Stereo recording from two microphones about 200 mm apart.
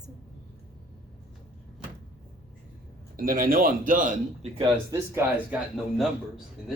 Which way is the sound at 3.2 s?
45° right (ahead or behind).